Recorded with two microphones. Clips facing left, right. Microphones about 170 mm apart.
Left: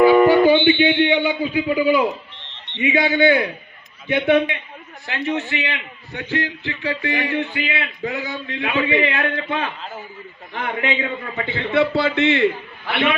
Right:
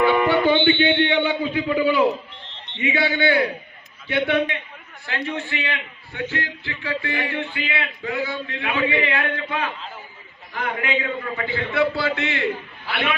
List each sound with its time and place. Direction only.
0.0 s music: 40° left (ahead or behind)
0.7 s a man's voice: 10° left (ahead or behind)